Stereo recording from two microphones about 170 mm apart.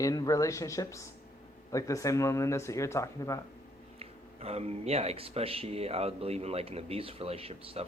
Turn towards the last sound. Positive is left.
turn(degrees=-35)  # may be behind; listen again after turning